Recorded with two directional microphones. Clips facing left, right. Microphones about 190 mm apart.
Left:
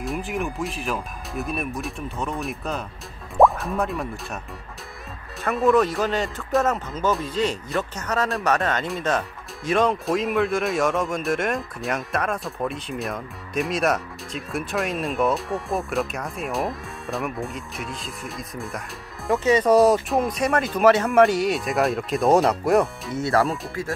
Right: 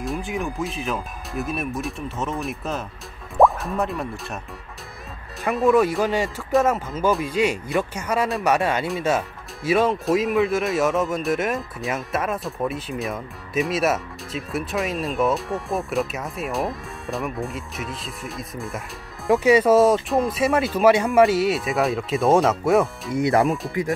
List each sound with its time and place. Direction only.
0.0 s speech: centre (ahead or behind)
5.5 s speech: 5° right (ahead or behind)
19.3 s speech: 10° right (ahead or behind)
23.1 s speech: 15° right (ahead or behind)